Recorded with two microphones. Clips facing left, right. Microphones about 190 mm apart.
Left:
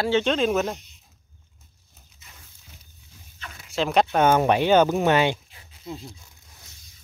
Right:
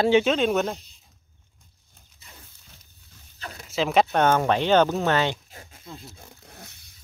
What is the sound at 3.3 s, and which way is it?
Dog, 35° right (ahead or behind).